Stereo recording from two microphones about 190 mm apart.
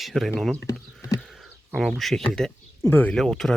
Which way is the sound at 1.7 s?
Centre (ahead or behind).